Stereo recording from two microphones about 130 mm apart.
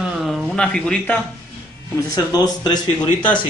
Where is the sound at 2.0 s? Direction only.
30° left (ahead or behind).